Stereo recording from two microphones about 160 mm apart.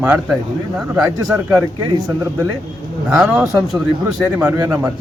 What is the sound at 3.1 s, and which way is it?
A man's voice, 10° right (ahead or behind).